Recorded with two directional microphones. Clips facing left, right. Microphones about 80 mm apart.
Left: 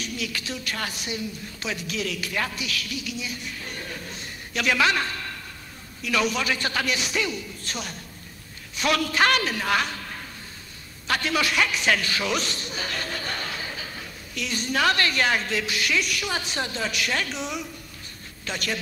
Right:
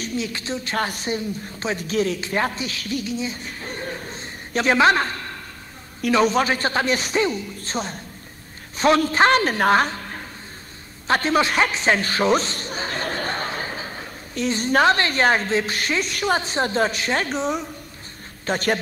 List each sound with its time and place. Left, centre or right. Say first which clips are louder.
0.0 s speech: right 5 dB; right
0.7 s speech: right 10 dB; right
6.1 s a man's voice: right 6 dB; right
11.1 s a man's voice: right 6 dB; right